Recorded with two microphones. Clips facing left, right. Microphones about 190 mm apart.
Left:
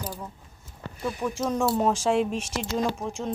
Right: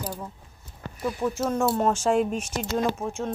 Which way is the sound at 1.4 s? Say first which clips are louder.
Even; centre (ahead or behind).